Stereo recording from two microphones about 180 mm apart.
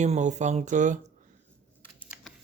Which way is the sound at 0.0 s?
40° right (ahead or behind).